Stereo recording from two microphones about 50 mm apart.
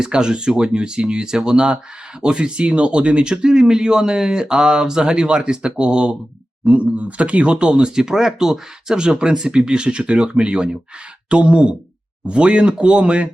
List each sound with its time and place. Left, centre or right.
0.0 s speech: centre